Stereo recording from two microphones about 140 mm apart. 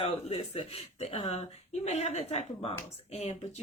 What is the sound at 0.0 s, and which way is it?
Speech, 40° left (ahead or behind).